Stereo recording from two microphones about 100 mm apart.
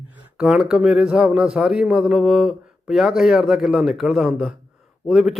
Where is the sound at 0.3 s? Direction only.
5° right (ahead or behind).